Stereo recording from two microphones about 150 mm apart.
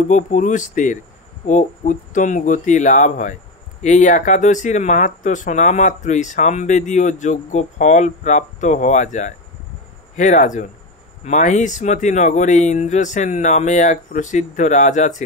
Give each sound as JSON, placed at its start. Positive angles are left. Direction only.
{"t": 0.1, "sound": "speech", "side_deg": 55}